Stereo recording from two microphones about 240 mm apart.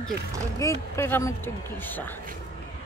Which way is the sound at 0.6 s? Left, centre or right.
Centre.